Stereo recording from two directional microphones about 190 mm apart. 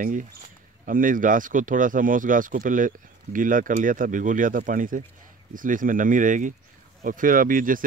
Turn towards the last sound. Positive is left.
turn(degrees=-45)  # may be behind; listen again after turning